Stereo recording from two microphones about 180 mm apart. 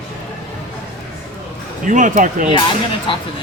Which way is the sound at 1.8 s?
45° right (ahead or behind).